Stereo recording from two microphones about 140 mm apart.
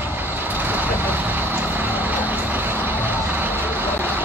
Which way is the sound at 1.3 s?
15° right (ahead or behind).